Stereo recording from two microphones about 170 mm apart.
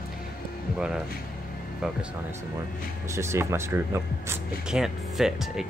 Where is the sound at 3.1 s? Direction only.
15° right (ahead or behind).